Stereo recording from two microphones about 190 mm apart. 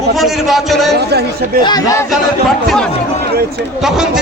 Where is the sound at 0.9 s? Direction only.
60° right (ahead or behind).